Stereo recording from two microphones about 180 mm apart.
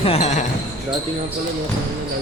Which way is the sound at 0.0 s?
35° left (ahead or behind).